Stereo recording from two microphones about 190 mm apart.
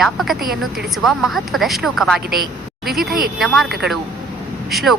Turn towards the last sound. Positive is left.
turn(degrees=0)  # may be behind; listen again after turning